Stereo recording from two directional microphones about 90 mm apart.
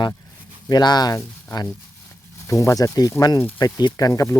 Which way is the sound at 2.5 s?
35° left (ahead or behind).